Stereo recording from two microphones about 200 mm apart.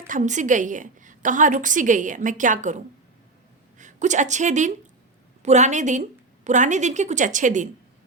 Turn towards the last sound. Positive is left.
turn(degrees=-40)  # may be behind; listen again after turning